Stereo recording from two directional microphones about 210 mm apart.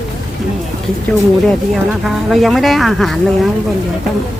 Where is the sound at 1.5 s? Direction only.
Centre (ahead or behind).